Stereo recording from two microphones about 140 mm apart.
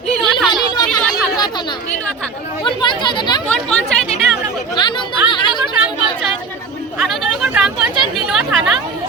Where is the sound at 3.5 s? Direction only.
5° left (ahead or behind).